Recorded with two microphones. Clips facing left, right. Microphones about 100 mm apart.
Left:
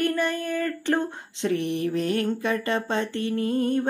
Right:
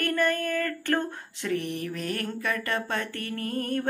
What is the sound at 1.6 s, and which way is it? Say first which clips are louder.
Mantra: left 5 dB; 40° right (ahead or behind).